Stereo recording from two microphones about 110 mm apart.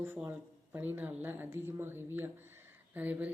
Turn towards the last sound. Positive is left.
turn(degrees=-15)  # may be behind; listen again after turning